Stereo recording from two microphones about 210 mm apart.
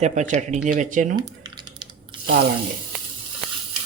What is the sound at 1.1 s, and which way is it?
Typing, 20° right (ahead or behind).